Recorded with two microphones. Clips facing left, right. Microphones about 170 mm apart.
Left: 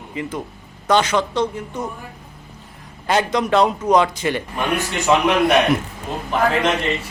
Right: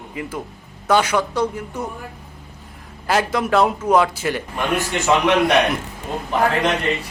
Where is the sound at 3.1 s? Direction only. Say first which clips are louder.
Left 1 dB; 5° right (ahead or behind).